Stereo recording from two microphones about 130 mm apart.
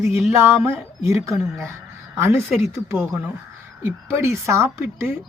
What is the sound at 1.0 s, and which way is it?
Speech, 20° right (ahead or behind).